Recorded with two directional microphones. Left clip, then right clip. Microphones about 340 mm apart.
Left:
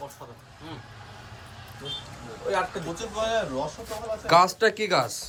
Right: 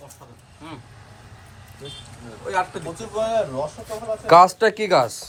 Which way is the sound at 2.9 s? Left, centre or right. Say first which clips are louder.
Right 5 dB; centre.